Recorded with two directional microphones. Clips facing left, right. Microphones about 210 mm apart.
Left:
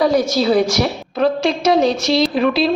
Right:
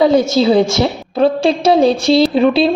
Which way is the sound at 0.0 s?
25° right (ahead or behind).